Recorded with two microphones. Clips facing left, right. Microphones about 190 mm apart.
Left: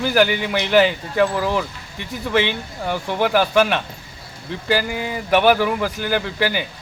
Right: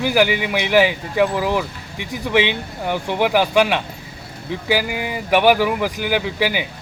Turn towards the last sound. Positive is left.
turn(degrees=-10)  # may be behind; listen again after turning